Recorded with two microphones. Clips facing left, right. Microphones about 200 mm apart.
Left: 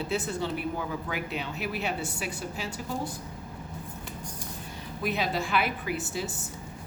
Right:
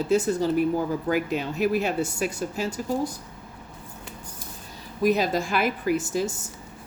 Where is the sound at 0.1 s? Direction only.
40° right (ahead or behind).